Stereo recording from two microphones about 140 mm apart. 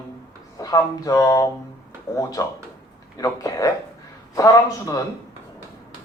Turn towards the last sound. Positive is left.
turn(degrees=25)  # may be behind; listen again after turning